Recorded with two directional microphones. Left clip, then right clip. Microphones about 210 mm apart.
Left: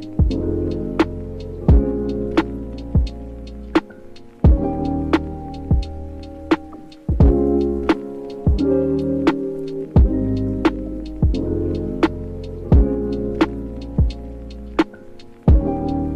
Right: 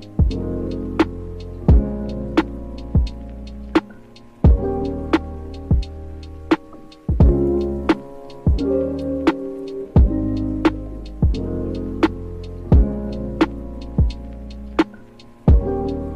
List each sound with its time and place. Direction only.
0.2 s music: centre (ahead or behind)
1.7 s heart sounds: centre (ahead or behind)
3.7 s music: centre (ahead or behind)